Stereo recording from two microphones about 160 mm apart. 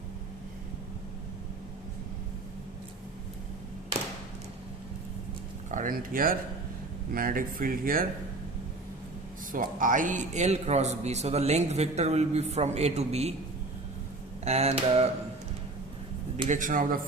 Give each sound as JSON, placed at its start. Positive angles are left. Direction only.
{"t": 5.7, "sound": "speech", "side_deg": -60}
{"t": 9.5, "sound": "a man's voice", "side_deg": -60}
{"t": 14.4, "sound": "a sound", "side_deg": -40}
{"t": 16.5, "sound": "speech", "side_deg": -55}